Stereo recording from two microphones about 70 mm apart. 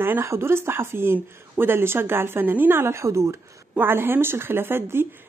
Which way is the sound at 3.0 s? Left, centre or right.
Right.